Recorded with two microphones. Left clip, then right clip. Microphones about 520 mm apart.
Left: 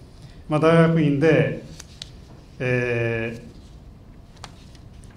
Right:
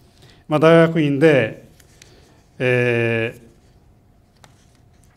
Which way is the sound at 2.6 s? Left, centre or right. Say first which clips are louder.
Right 5 dB; right.